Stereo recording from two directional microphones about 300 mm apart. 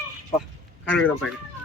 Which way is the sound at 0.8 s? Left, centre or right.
Centre.